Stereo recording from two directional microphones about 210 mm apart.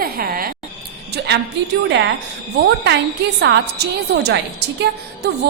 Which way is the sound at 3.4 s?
50° right (ahead or behind).